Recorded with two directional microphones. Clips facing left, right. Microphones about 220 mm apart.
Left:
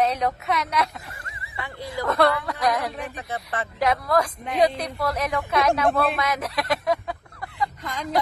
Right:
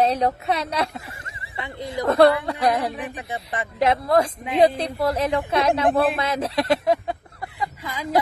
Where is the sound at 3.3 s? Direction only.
25° right (ahead or behind).